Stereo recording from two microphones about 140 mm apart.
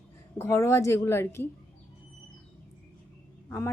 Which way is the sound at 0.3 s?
20° left (ahead or behind).